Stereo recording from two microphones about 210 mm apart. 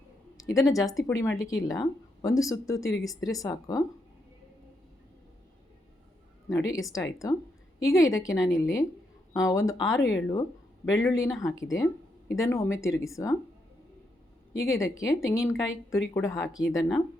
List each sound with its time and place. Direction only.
0.3 s a woman's voice: 15° left (ahead or behind)
6.5 s a woman's voice: 15° left (ahead or behind)
14.5 s a woman's voice: 15° left (ahead or behind)